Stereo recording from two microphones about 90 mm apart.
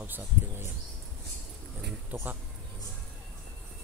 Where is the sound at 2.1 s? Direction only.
20° right (ahead or behind).